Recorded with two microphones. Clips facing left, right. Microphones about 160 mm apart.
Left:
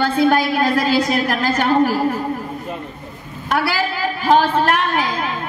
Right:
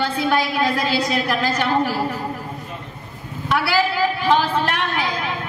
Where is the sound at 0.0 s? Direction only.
50° left (ahead or behind).